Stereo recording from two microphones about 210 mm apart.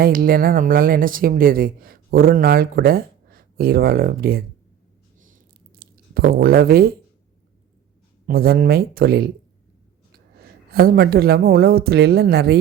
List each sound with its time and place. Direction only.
0.0 s speech: 45° right (ahead or behind)
5.2 s a sound: 40° right (ahead or behind)
8.3 s speech: 45° right (ahead or behind)
10.4 s speech: 45° right (ahead or behind)